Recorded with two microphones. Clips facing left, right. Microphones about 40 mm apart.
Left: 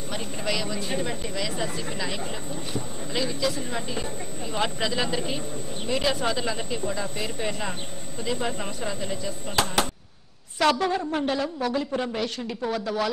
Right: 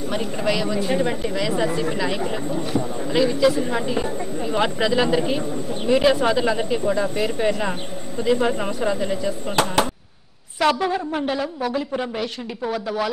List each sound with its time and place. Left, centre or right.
0.1 s speech: centre
10.6 s speech: centre